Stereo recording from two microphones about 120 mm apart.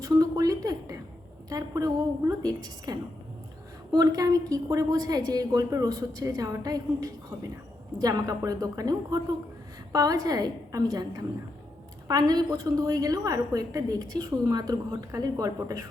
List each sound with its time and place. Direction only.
0.0 s a sound: 30° right (ahead or behind)
1.5 s a woman's voice: 30° right (ahead or behind)
12.0 s a woman's voice: 30° right (ahead or behind)